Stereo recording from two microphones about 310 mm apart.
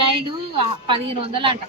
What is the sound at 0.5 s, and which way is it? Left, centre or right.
A woman's voice, centre.